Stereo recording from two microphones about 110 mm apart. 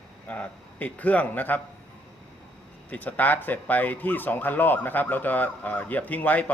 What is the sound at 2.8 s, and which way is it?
Speech, 15° left (ahead or behind).